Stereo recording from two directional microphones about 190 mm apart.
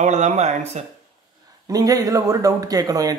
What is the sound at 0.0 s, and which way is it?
Speech, 40° right (ahead or behind).